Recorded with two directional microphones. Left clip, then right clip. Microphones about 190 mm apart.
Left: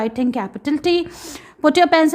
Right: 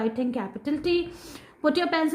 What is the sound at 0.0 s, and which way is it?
A woman's voice, 35° left (ahead or behind).